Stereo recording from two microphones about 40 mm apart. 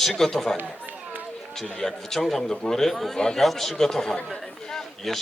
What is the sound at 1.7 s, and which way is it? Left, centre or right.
A man's voice, centre.